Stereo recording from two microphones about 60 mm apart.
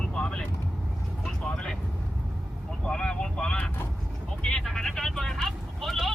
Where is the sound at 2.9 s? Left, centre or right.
Centre.